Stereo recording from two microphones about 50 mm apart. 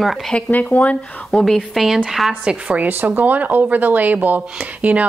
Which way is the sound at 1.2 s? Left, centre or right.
Centre.